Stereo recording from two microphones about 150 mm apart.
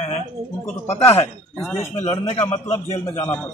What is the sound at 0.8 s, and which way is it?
Speech, 15° left (ahead or behind).